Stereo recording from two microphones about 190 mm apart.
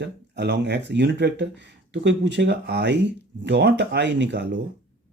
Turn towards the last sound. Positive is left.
turn(degrees=-65)  # may be behind; listen again after turning